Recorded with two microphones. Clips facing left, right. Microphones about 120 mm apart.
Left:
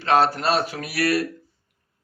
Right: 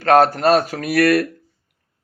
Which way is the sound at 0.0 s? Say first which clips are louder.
Right 6 dB; 50° right (ahead or behind).